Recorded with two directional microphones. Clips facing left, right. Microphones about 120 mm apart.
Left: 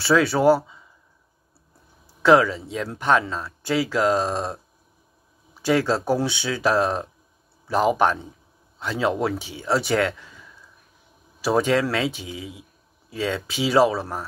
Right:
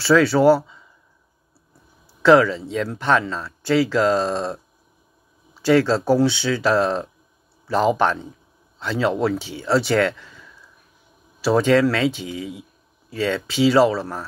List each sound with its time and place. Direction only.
0.0 s speech: 20° left (ahead or behind)
2.2 s speech: 15° left (ahead or behind)
5.7 s speech: 15° left (ahead or behind)
11.4 s speech: 15° left (ahead or behind)